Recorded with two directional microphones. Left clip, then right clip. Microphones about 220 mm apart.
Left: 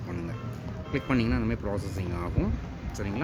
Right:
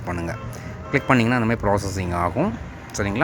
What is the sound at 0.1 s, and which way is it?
Speech, 10° right (ahead or behind).